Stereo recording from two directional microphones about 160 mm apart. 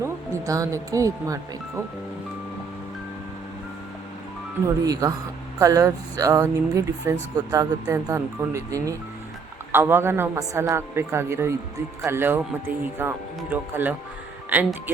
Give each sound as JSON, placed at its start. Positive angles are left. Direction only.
{"t": 0.0, "sound": "speech", "side_deg": -20}
{"t": 4.6, "sound": "speech", "side_deg": -20}